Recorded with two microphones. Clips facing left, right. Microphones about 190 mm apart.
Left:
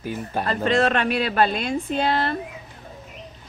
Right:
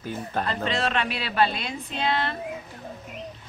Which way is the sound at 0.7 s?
50° left (ahead or behind).